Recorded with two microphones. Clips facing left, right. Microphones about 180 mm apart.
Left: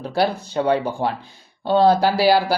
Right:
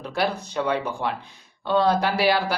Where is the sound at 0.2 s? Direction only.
30° left (ahead or behind).